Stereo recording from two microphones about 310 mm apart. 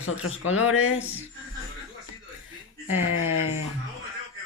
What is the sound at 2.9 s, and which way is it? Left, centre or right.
Speech, left.